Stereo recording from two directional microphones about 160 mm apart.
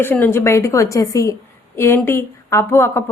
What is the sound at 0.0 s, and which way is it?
Speech, 10° left (ahead or behind).